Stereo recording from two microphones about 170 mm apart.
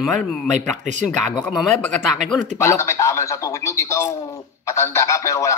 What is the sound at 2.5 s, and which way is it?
A man's voice, 15° left (ahead or behind).